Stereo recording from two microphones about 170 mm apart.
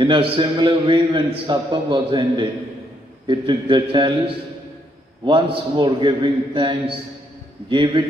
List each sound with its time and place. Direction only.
0.0 s a man's voice: 30° right (ahead or behind)
5.2 s a man's voice: 30° right (ahead or behind)